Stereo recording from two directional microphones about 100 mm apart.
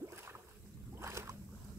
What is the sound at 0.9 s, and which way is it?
Boat, 25° right (ahead or behind).